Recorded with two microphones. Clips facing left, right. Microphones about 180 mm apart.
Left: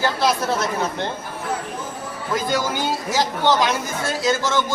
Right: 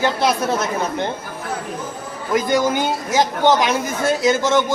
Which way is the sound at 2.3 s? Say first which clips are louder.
Right 5 dB; 20° right (ahead or behind).